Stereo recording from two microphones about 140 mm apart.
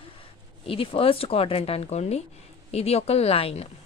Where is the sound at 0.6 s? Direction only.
40° left (ahead or behind).